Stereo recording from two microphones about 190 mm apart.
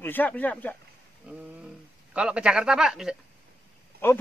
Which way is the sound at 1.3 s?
5° right (ahead or behind).